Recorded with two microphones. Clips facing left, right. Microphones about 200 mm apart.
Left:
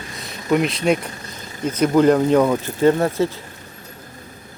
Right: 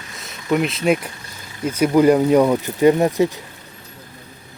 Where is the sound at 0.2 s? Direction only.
Centre (ahead or behind); by 3.4 s 15° right (ahead or behind).